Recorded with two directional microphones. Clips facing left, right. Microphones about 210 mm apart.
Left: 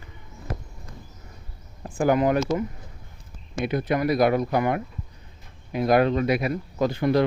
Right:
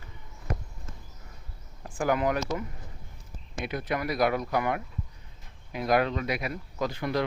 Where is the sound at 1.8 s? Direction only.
30° left (ahead or behind).